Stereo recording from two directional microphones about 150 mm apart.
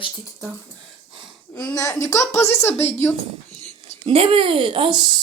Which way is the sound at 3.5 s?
45° left (ahead or behind).